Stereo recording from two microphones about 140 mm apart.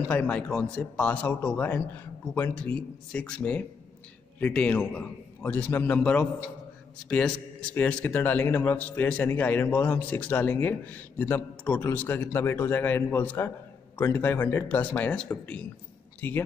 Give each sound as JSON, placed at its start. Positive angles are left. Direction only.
{"t": 0.1, "sound": "a man's voice", "side_deg": 10}